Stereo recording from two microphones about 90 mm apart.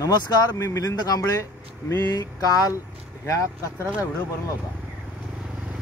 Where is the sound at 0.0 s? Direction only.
50° left (ahead or behind).